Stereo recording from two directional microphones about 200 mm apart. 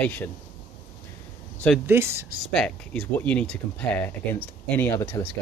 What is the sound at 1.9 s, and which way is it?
Speech, 15° right (ahead or behind).